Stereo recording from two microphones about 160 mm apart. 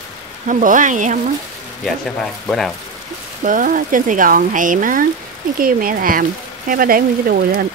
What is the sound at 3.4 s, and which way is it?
Speech, 55° right (ahead or behind).